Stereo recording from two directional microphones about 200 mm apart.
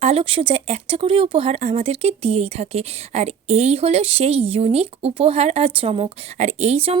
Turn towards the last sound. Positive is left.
turn(degrees=-30)  # may be behind; listen again after turning